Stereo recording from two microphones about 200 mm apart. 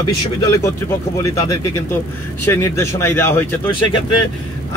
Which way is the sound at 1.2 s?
15° left (ahead or behind).